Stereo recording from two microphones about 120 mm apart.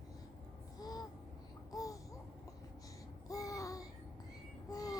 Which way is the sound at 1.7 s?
30° left (ahead or behind).